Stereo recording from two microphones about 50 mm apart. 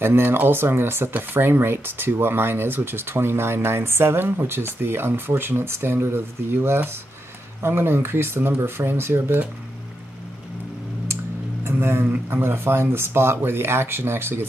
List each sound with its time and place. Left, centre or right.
0.0 s speech: right
11.6 s a man's voice: right